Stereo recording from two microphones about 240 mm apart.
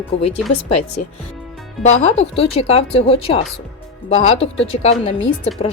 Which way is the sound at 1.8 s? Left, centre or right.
Left.